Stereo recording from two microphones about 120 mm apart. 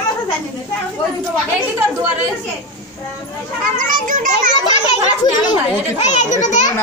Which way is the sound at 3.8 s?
90° right.